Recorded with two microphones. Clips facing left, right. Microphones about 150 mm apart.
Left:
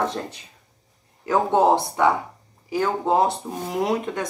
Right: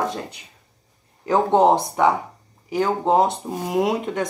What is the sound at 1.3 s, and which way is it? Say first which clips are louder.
Speech: right 2 dB; 20° right (ahead or behind).